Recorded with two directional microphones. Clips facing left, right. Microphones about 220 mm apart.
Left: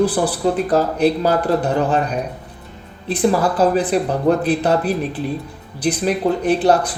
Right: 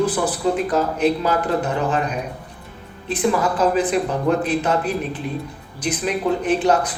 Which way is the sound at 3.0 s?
35° left (ahead or behind).